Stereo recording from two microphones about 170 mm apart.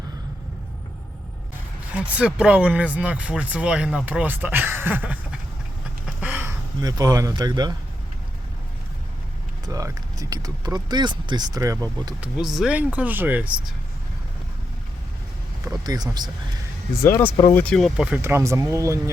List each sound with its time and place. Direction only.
1.9 s speech: 5° right (ahead or behind); by 7.8 s 25° right (ahead or behind)
9.6 s speech: 20° right (ahead or behind)
12.2 s speech: centre (ahead or behind)
15.6 s speech: 20° right (ahead or behind)
17.0 s speech: 15° left (ahead or behind)
17.5 s speech: 5° left (ahead or behind); by 19.1 s 20° right (ahead or behind)